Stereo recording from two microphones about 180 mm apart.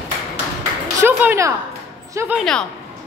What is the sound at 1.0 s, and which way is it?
A woman's voice, 15° right (ahead or behind).